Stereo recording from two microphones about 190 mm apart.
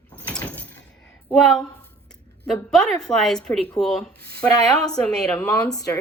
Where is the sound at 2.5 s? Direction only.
5° left (ahead or behind).